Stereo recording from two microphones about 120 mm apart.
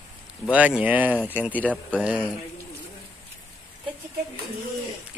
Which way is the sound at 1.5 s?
10° left (ahead or behind).